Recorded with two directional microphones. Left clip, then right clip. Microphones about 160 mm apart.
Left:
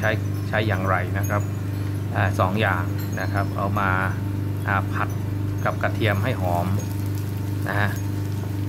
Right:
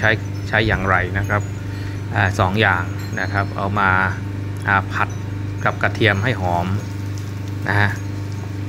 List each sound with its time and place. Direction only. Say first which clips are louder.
0.0 s speech: right 6 dB; 15° right (ahead or behind)
7.6 s vehicle: right 6 dB; 20° right (ahead or behind)